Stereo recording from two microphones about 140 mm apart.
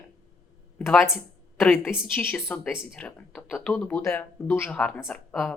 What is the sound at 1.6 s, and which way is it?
Speech, 10° left (ahead or behind).